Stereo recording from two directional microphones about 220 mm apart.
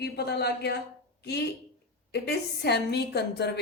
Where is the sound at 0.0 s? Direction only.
50° left (ahead or behind).